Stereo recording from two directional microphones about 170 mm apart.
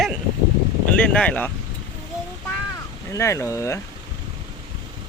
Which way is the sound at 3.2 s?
15° left (ahead or behind).